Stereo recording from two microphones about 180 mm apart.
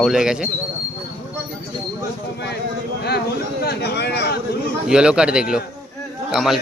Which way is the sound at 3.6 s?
65° left (ahead or behind).